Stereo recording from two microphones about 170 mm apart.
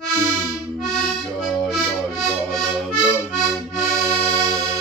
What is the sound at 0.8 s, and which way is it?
Music, centre (ahead or behind).